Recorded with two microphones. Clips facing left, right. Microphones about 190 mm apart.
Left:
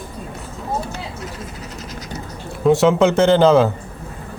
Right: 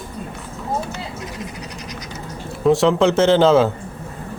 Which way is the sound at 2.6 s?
Centre (ahead or behind).